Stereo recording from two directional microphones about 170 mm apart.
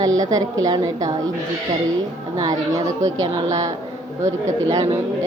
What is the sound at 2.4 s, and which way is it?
A woman's voice, 20° right (ahead or behind).